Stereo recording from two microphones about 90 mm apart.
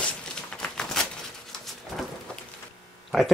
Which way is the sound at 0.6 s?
5° left (ahead or behind).